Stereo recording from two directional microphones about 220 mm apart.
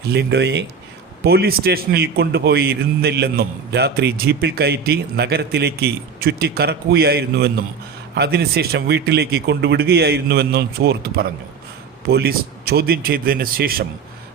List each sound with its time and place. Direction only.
0.0 s a man's voice: 45° right (ahead or behind)